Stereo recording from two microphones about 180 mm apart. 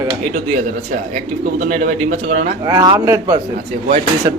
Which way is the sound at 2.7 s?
20° right (ahead or behind).